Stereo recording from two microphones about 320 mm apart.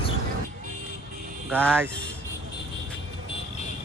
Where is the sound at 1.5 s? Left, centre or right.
Centre.